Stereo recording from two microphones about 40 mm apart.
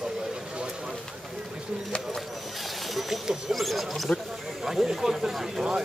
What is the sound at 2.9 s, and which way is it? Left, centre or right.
Speech, centre.